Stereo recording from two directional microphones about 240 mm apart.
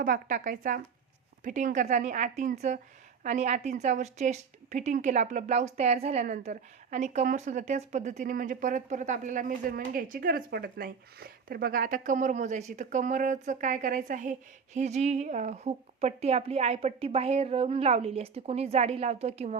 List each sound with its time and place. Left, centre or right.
0.0 s a woman's voice: right